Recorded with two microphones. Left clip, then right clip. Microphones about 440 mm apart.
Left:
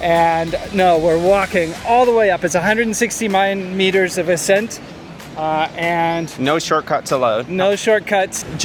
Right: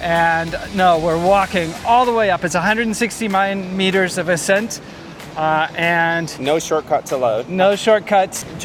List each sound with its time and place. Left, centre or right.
0.0 s speech: centre
6.6 s speech: left
6.9 s speech: left
7.5 s speech: centre